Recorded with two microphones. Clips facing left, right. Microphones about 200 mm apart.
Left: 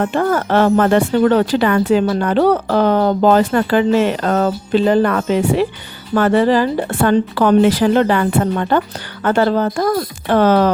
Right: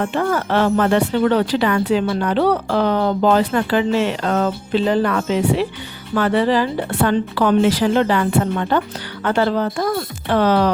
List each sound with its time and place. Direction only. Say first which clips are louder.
0.0 s speech: left 3 dB; 45° left (ahead or behind)